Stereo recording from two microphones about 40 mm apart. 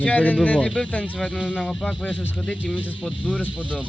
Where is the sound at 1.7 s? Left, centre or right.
Centre.